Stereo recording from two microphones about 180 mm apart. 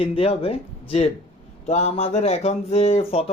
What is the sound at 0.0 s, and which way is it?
Speech, 30° left (ahead or behind).